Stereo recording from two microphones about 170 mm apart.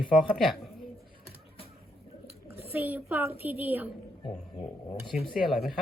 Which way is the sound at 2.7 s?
10° right (ahead or behind).